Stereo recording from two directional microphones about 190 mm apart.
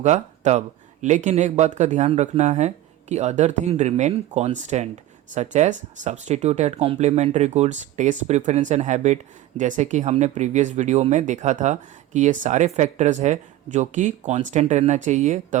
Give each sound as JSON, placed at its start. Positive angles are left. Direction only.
{"t": 0.0, "sound": "speech", "side_deg": -35}